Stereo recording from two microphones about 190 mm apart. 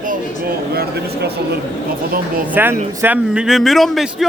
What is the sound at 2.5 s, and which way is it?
A man's voice, 10° right (ahead or behind).